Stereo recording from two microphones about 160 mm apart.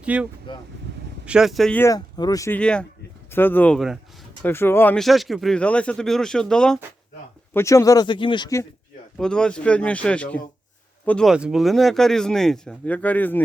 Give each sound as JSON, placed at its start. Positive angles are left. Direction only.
{"t": 0.0, "sound": "speech", "side_deg": -10}
{"t": 1.8, "sound": "speech", "side_deg": 25}
{"t": 2.6, "sound": "speech", "side_deg": 5}
{"t": 4.9, "sound": "speech", "side_deg": 0}
{"t": 7.5, "sound": "speech", "side_deg": 20}
{"t": 9.1, "sound": "speech", "side_deg": 5}
{"t": 11.3, "sound": "speech", "side_deg": -5}